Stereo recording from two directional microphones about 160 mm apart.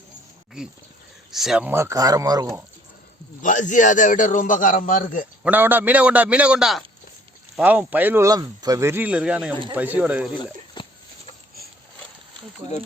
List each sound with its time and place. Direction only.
1.3 s speech: centre (ahead or behind); by 2.6 s 20° right (ahead or behind)
3.4 s a man's voice: 50° left (ahead or behind)
5.4 s speech: 10° right (ahead or behind)
10.8 s a sound: 30° left (ahead or behind)